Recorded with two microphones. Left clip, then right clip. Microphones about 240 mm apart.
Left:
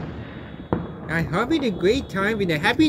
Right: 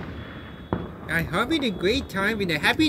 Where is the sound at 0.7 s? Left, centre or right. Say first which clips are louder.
Left 4 dB; left.